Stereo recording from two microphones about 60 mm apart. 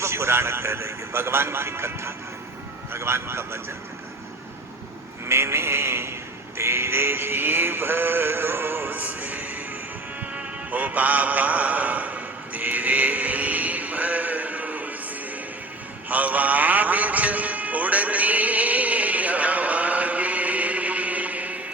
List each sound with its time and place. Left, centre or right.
0.0 s a man's voice: right
5.3 s a man's voice: right
6.6 s synthetic singing: right
10.2 s music: right
16.0 s music: right